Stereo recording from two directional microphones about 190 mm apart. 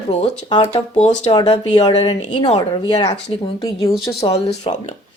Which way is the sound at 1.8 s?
20° left (ahead or behind).